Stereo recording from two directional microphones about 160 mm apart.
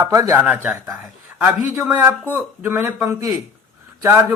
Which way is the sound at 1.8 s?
15° right (ahead or behind).